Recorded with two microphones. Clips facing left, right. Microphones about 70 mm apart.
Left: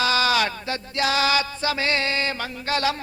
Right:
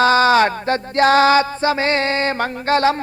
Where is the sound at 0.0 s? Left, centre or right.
Right.